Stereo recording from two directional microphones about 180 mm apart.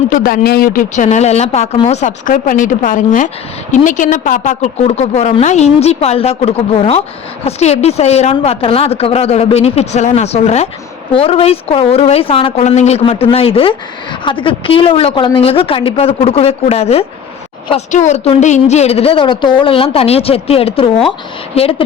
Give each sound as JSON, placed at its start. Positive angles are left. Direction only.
{"t": 0.1, "sound": "speech", "side_deg": 55}
{"t": 1.0, "sound": "a woman's voice", "side_deg": 35}